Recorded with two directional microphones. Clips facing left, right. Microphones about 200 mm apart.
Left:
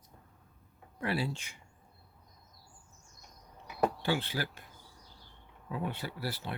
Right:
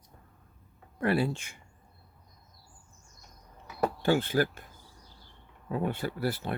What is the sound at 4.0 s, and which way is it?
Speech, 50° right (ahead or behind).